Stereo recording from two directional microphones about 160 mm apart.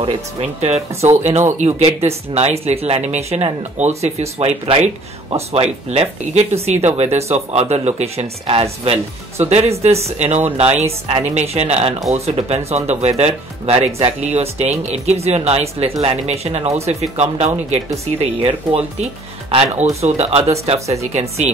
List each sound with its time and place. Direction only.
0.0 s speech: 40° right (ahead or behind)